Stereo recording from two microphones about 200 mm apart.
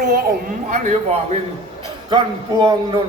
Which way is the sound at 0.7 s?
35° right (ahead or behind).